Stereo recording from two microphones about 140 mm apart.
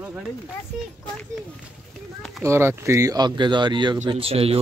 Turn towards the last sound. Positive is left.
turn(degrees=-45)  # may be behind; listen again after turning